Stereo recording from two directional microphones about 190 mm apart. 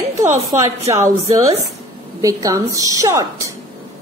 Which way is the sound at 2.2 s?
15° right (ahead or behind).